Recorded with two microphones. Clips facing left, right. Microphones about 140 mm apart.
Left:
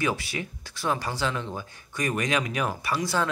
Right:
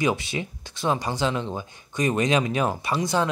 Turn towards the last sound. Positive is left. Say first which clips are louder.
# right 3 dB
turn(degrees=-20)  # may be behind; listen again after turning